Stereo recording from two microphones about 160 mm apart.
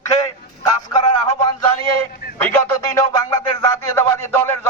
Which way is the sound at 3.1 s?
25° left (ahead or behind).